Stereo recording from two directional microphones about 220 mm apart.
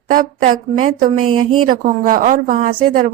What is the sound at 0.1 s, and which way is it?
A woman's voice, 40° right (ahead or behind).